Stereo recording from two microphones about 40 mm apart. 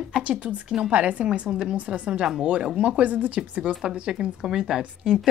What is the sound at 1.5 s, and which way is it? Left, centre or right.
Speech, right.